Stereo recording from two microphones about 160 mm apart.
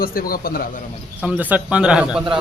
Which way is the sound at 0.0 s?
65° left (ahead or behind).